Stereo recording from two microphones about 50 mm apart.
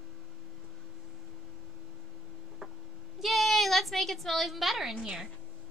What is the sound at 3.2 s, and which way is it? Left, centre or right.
A woman's voice, centre.